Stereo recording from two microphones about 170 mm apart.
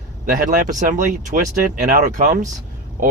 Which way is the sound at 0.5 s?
50° right (ahead or behind).